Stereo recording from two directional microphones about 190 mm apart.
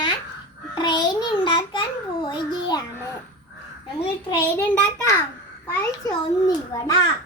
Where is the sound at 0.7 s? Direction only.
25° left (ahead or behind).